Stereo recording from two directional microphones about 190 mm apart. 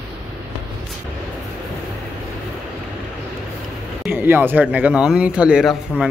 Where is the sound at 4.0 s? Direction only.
10° right (ahead or behind).